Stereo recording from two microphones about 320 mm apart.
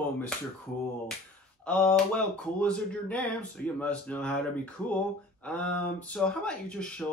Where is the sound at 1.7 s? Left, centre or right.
Centre.